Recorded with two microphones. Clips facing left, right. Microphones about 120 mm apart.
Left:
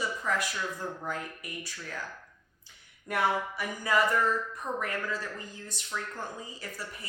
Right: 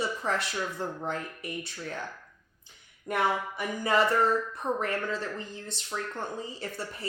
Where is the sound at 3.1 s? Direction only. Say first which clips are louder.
Right 1 dB; 25° right (ahead or behind).